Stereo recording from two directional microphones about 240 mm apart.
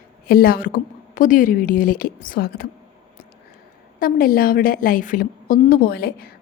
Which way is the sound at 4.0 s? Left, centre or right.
Left.